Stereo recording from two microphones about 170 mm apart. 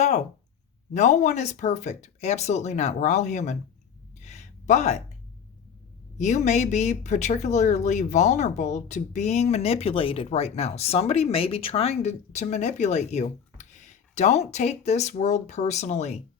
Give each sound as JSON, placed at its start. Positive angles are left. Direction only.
{"t": 0.9, "sound": "speech", "side_deg": 45}
{"t": 4.2, "sound": "a sound", "side_deg": 45}
{"t": 6.1, "sound": "speech", "side_deg": 45}